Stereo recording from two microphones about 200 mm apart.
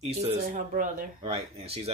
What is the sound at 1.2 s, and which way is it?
Speech, 30° right (ahead or behind).